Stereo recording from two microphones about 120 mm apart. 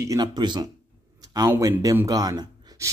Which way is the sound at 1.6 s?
30° right (ahead or behind).